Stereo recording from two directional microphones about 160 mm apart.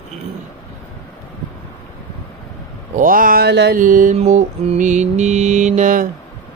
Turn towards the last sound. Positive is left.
turn(degrees=-55)  # may be behind; listen again after turning